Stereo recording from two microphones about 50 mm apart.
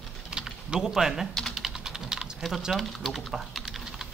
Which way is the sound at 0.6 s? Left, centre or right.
Centre.